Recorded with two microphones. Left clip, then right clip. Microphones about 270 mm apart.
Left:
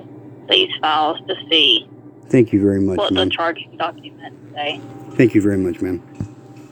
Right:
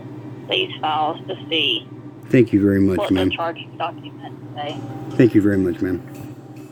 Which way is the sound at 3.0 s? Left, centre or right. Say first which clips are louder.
Left 3 dB; left.